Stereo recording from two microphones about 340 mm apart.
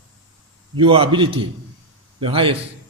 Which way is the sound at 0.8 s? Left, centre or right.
Centre.